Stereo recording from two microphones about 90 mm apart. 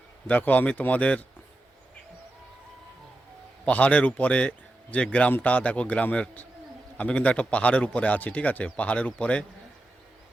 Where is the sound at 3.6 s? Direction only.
15° left (ahead or behind).